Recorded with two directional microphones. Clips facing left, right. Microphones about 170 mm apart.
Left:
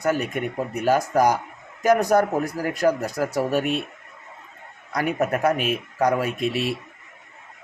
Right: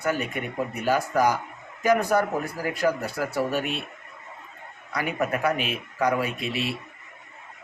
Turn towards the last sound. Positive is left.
turn(degrees=45)  # may be behind; listen again after turning